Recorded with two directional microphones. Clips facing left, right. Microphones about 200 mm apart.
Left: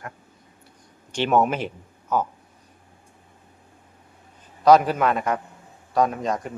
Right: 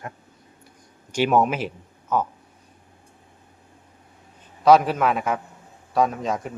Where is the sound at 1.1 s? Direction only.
10° right (ahead or behind).